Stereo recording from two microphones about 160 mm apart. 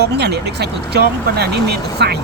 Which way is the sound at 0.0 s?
90° right.